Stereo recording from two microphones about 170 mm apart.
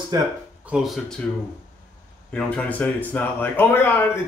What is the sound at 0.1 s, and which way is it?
Speech, 25° right (ahead or behind).